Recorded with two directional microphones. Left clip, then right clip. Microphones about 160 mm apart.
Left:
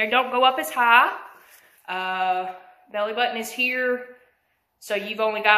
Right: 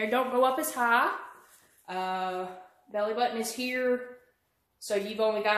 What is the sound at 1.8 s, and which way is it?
A woman's voice, 30° right (ahead or behind).